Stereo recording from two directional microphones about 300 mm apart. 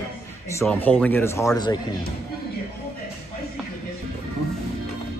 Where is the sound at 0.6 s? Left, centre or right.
Centre.